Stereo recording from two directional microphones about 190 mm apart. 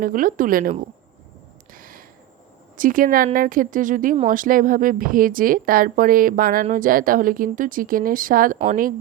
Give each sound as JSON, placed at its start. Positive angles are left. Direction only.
{"t": 0.0, "sound": "speech", "side_deg": -45}
{"t": 1.7, "sound": "a sound", "side_deg": -50}
{"t": 2.7, "sound": "speech", "side_deg": -45}